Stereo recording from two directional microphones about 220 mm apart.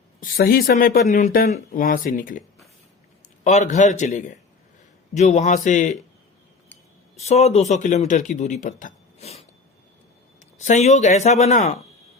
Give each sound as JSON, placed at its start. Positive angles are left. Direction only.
{"t": 0.2, "sound": "speech", "side_deg": 40}
{"t": 3.4, "sound": "speech", "side_deg": 35}
{"t": 7.2, "sound": "speech", "side_deg": 30}